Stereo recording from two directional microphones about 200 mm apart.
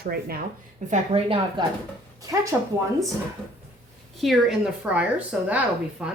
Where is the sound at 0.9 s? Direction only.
30° right (ahead or behind).